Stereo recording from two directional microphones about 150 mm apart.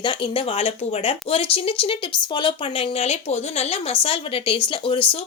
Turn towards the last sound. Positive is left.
turn(degrees=35)  # may be behind; listen again after turning